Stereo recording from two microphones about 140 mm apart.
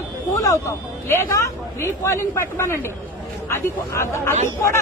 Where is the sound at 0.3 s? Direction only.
20° left (ahead or behind).